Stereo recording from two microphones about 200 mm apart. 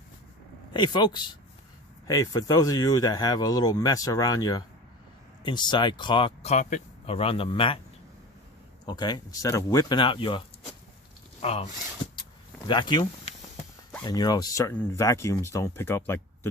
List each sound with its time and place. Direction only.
0.7 s speech: 20° left (ahead or behind)
8.9 s speech: 20° left (ahead or behind)
11.4 s speech: 30° left (ahead or behind); by 16.5 s 10° left (ahead or behind)